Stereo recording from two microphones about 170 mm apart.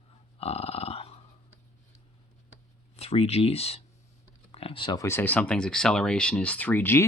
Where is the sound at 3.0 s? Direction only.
35° left (ahead or behind); by 7.1 s 15° left (ahead or behind).